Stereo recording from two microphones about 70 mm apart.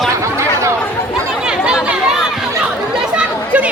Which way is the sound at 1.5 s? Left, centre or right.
Centre.